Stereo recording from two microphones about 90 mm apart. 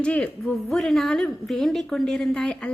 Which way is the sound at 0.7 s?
Centre (ahead or behind).